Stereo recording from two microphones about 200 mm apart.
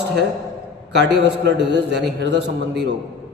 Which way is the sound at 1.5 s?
60° right (ahead or behind).